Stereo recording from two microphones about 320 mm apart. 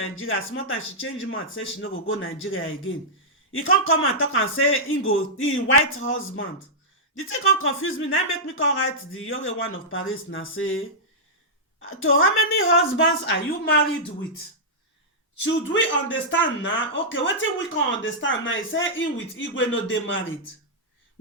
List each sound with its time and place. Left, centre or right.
0.0 s speech: left
15.4 s speech: left